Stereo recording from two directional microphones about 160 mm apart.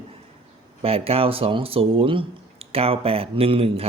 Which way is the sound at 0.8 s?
35° right (ahead or behind).